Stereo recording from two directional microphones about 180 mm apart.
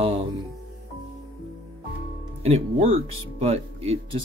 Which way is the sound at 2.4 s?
35° right (ahead or behind).